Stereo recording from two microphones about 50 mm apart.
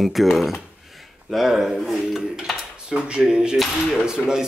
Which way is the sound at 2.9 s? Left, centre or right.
Centre.